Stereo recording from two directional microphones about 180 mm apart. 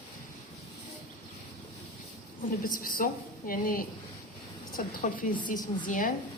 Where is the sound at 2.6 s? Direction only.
50° left (ahead or behind).